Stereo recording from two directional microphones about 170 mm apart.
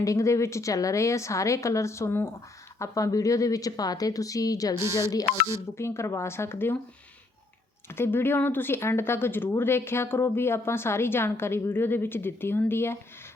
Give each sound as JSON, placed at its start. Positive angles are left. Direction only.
{"t": 0.0, "sound": "speech", "side_deg": 20}
{"t": 4.8, "sound": "speech", "side_deg": -15}
{"t": 5.7, "sound": "speech", "side_deg": 15}
{"t": 7.9, "sound": "speech", "side_deg": 15}